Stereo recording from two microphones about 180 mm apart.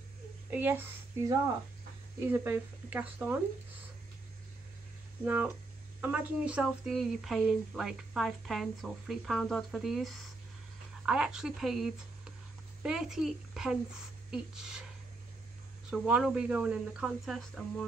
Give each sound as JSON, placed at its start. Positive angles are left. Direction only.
{"t": 0.5, "sound": "a woman's voice", "side_deg": -10}
{"t": 2.3, "sound": "speech", "side_deg": -10}
{"t": 5.2, "sound": "speech", "side_deg": -10}
{"t": 15.9, "sound": "speech", "side_deg": -5}